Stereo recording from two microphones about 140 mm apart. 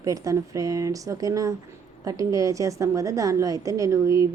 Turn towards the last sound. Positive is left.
turn(degrees=-20)  # may be behind; listen again after turning